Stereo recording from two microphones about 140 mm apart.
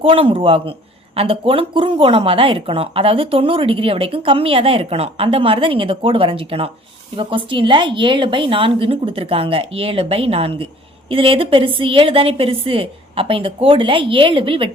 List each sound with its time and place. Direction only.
0.0 s speech: 40° right (ahead or behind)